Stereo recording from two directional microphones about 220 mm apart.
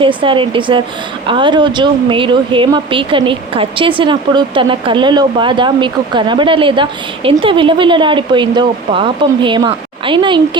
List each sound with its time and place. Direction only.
0.2 s speech: 25° right (ahead or behind)